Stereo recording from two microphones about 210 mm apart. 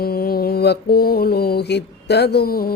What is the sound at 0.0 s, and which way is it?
Mantra, 45° left (ahead or behind).